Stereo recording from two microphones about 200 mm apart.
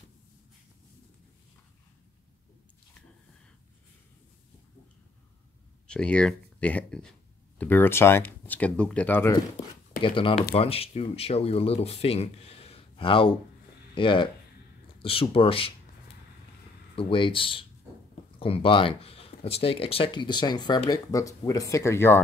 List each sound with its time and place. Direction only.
5.9 s speech: 5° left (ahead or behind)
10.0 s speech: 25° left (ahead or behind)
17.1 s speech: 25° left (ahead or behind)